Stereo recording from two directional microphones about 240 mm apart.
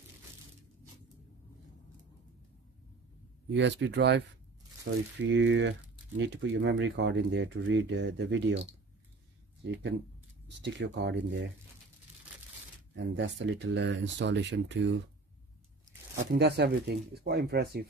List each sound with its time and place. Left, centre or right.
3.5 s speech: right
10.6 s speech: right
12.9 s speech: right
16.3 s speech: right